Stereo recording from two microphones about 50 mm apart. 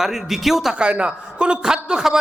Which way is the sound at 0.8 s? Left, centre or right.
Right.